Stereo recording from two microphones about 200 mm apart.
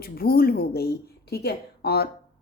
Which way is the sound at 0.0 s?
50° left (ahead or behind).